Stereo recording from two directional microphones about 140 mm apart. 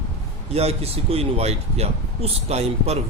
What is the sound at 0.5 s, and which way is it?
Speech, 45° right (ahead or behind).